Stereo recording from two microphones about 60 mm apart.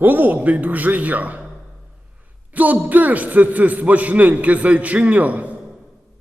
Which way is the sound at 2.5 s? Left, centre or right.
Right.